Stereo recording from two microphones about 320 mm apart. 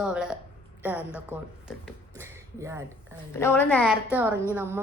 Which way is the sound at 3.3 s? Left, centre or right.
Centre.